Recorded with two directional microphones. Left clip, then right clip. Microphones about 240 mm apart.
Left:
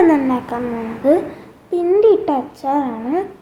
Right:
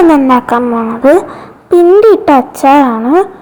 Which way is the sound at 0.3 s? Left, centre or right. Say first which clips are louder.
Right 13 dB; right.